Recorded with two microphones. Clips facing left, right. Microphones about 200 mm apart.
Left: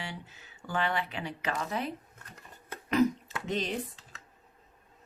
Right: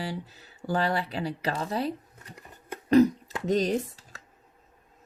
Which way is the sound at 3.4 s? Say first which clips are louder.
Right 8 dB; 40° right (ahead or behind).